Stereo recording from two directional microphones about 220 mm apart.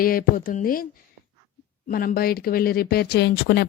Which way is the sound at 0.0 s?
40° left (ahead or behind).